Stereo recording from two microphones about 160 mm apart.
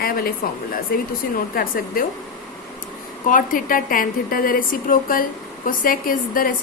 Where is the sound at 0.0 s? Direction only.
65° left (ahead or behind).